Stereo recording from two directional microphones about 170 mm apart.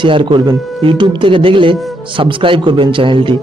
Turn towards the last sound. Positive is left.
turn(degrees=-30)  # may be behind; listen again after turning